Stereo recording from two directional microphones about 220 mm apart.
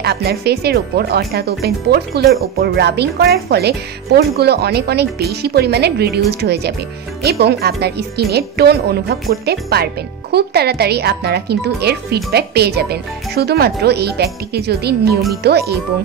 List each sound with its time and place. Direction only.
0.0 s speech: 45° right (ahead or behind)